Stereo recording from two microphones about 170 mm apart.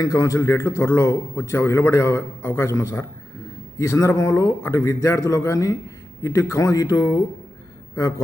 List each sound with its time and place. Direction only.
0.0 s a man's voice: 20° left (ahead or behind)